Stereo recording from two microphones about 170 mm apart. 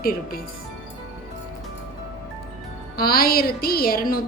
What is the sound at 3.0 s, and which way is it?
A woman's voice, 60° left (ahead or behind).